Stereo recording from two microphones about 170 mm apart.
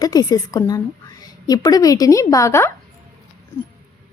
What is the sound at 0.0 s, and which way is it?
A woman's voice, 20° left (ahead or behind).